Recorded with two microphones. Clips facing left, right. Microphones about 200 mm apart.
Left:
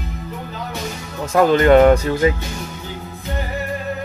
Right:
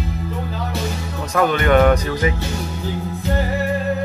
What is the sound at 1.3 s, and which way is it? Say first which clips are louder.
Speech: left 4 dB; 30° left (ahead or behind).